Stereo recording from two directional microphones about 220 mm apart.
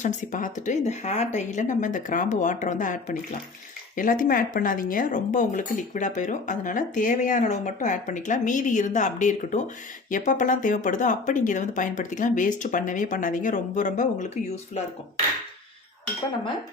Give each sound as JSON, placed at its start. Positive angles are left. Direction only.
{"t": 0.0, "sound": "speech", "side_deg": 35}